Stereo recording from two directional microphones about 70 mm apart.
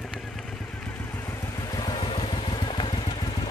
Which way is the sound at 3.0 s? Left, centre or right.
Left.